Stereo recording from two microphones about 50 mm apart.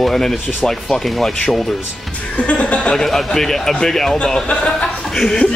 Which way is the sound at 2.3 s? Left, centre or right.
Left.